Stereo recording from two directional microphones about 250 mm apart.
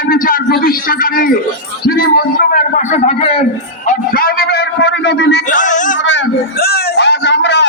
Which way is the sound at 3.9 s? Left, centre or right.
Left.